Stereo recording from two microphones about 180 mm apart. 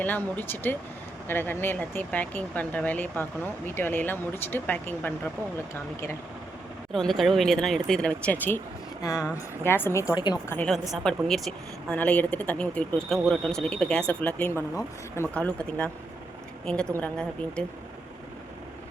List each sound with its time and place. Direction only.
0.0 s speech: 10° left (ahead or behind)
6.9 s speech: centre (ahead or behind)
9.6 s speech: 15° left (ahead or behind)
10.7 s speech: centre (ahead or behind)